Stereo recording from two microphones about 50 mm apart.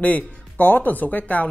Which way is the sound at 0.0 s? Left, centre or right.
Left.